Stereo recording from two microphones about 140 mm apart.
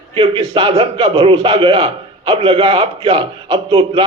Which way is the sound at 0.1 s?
40° right (ahead or behind).